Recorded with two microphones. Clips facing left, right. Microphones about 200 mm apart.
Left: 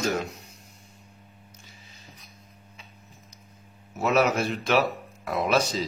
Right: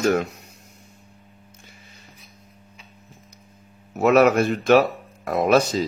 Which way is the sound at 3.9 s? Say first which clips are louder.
Right 7 dB; 65° right (ahead or behind).